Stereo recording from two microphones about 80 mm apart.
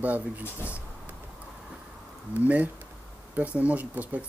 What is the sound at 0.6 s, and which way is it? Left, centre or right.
Speech, left.